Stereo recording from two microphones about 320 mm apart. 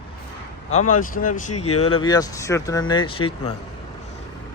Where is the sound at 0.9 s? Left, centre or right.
Left.